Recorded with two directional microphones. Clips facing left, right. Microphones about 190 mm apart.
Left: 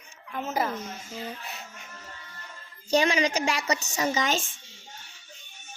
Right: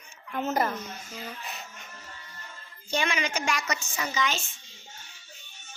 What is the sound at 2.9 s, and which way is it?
Speech, 35° left (ahead or behind).